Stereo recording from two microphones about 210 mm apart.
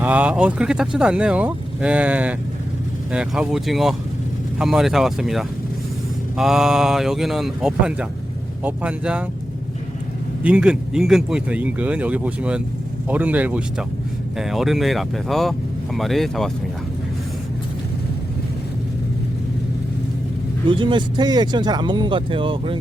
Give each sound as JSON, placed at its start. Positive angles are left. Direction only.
{"t": 0.0, "sound": "speech", "side_deg": -5}
{"t": 10.4, "sound": "speech", "side_deg": -5}
{"t": 20.7, "sound": "speech", "side_deg": -20}